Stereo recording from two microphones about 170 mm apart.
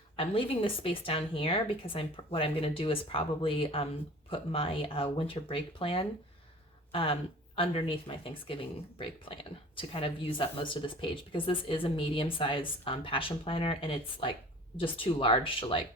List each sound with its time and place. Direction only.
0.2 s speech: 35° left (ahead or behind)